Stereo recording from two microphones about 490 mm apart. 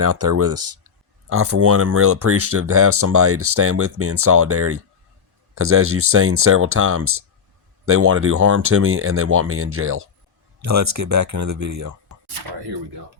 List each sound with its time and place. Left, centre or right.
0.0 s speech: right